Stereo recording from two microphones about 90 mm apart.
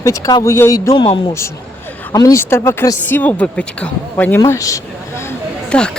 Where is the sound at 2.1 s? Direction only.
40° left (ahead or behind).